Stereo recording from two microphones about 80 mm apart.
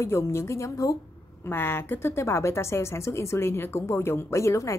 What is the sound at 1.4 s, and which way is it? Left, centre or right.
A woman's voice, left.